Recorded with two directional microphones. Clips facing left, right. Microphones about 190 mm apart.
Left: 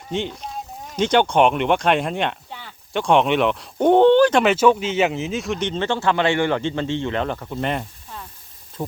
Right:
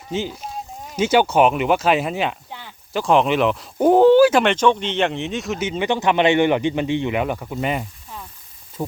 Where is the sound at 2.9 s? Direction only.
Centre (ahead or behind).